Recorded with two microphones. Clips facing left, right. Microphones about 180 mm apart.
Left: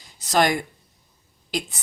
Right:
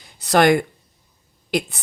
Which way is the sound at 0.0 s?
60° right (ahead or behind).